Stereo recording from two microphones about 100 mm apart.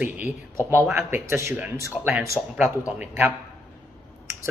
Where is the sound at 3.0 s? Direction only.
15° right (ahead or behind).